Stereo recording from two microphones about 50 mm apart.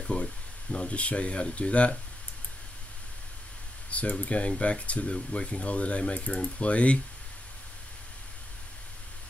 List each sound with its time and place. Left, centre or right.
0.0 s speech: left
3.9 s speech: left